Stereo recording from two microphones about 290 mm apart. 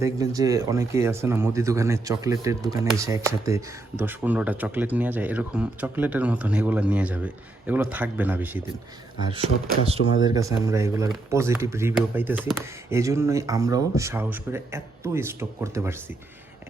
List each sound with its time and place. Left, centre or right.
0.0 s speech: centre
9.2 s speech: centre